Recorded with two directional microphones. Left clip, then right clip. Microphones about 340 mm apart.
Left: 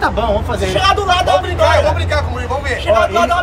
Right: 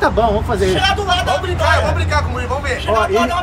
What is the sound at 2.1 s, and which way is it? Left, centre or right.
Speech, left.